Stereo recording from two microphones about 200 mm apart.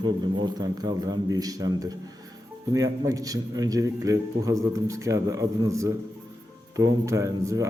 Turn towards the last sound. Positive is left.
turn(degrees=-15)  # may be behind; listen again after turning